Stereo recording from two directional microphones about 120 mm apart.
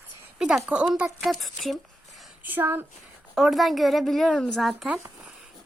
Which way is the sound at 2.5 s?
15° right (ahead or behind).